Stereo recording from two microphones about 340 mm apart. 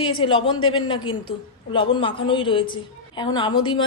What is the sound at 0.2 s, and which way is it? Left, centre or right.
A woman's voice, centre.